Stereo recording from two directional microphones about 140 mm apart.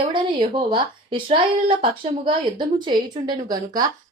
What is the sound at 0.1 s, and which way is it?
A woman's voice, 35° right (ahead or behind).